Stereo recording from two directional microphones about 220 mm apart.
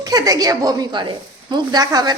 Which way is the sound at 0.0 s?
15° right (ahead or behind).